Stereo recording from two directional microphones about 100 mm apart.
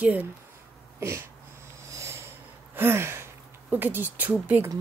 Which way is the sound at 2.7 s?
25° right (ahead or behind).